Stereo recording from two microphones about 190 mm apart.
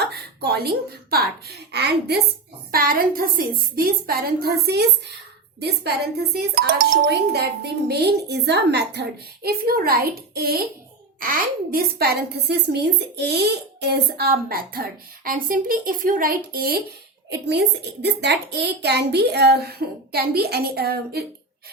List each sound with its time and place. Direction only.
0.0 s speech: 55° right (ahead or behind)
2.7 s a woman's voice: 50° right (ahead or behind)